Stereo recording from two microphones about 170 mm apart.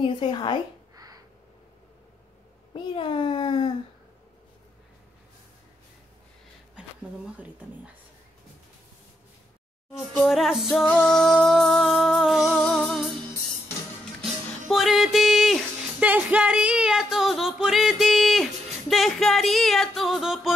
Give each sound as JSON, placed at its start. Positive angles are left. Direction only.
{"t": 0.0, "sound": "a child's voice", "side_deg": 30}
{"t": 0.9, "sound": "crow", "side_deg": -20}
{"t": 2.7, "sound": "a child's voice", "side_deg": 30}
{"t": 9.9, "sound": "music", "side_deg": 0}
{"t": 14.7, "sound": "music", "side_deg": 0}